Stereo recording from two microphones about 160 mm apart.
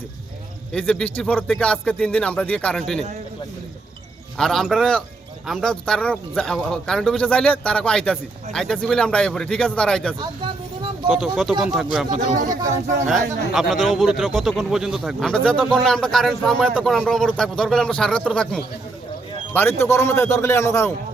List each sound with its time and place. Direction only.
0.7 s a man's voice: 5° left (ahead or behind)
4.4 s a man's voice: centre (ahead or behind)
13.1 s a man's voice: centre (ahead or behind)
19.5 s speech: 15° left (ahead or behind)